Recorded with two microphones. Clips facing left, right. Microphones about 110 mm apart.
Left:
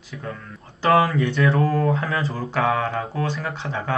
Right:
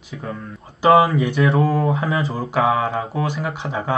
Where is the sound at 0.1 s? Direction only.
25° right (ahead or behind).